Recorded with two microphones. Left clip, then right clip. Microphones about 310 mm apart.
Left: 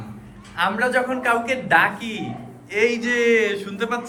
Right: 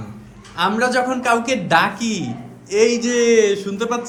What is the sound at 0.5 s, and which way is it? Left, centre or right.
A man's voice, centre.